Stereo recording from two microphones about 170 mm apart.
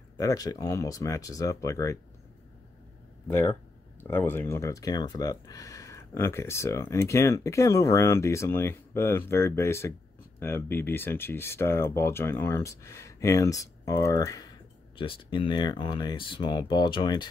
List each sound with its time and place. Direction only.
0.2 s speech: 20° left (ahead or behind)
4.0 s speech: 15° left (ahead or behind)
15.0 s speech: 30° left (ahead or behind)